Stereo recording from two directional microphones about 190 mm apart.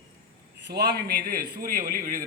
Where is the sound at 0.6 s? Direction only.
60° right (ahead or behind).